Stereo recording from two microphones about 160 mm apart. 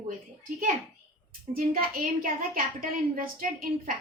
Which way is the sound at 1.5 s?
65° right (ahead or behind).